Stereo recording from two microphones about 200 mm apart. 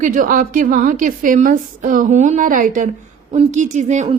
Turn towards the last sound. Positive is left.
turn(degrees=-35)  # may be behind; listen again after turning